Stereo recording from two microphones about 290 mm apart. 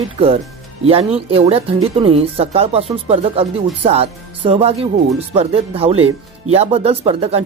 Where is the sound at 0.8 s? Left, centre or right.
Centre.